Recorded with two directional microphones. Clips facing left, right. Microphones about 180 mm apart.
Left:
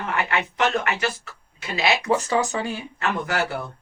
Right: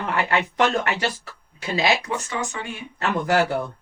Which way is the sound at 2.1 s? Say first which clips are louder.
Left 6 dB; 35° left (ahead or behind).